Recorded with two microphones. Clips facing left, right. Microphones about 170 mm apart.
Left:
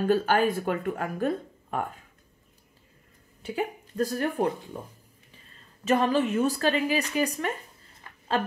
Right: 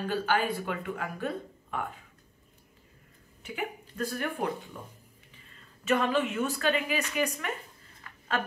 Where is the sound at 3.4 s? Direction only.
35° left (ahead or behind).